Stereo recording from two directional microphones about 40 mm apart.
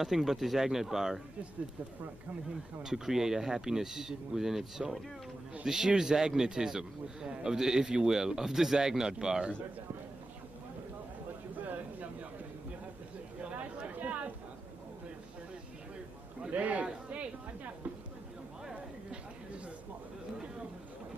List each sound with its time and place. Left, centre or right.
0.0 s a man's voice: centre
2.8 s a man's voice: centre
11.5 s a sound: right
13.4 s chatter: right
16.4 s chatter: right